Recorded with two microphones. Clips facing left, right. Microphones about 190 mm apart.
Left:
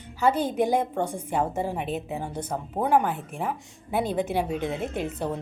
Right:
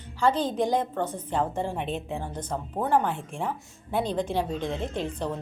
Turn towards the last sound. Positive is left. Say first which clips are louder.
# left 1 dB
turn(degrees=10)  # may be behind; listen again after turning